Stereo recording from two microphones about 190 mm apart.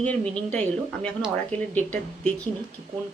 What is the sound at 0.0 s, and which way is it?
A woman's voice, 5° left (ahead or behind).